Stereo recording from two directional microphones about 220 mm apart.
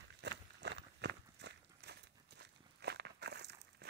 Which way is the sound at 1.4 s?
50° right (ahead or behind).